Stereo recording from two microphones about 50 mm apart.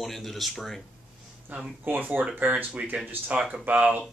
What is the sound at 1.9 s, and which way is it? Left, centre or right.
Speech, right.